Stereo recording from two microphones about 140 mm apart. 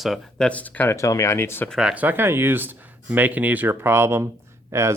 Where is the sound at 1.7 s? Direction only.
5° right (ahead or behind).